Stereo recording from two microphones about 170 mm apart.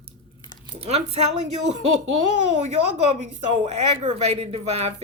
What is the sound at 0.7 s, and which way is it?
Speech, 35° right (ahead or behind).